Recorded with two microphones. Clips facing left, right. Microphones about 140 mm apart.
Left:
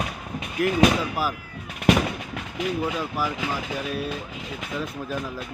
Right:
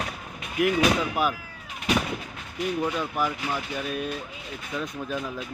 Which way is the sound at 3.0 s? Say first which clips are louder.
Even; 5° left (ahead or behind).